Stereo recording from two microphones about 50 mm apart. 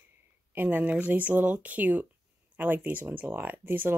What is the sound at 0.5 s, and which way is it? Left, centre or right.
Speech, right.